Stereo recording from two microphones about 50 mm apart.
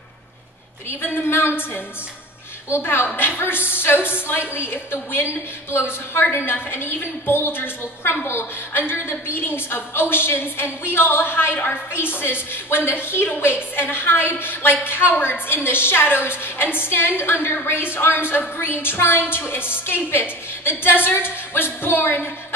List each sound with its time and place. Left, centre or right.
0.8 s a woman's voice: left
2.8 s a woman's voice: left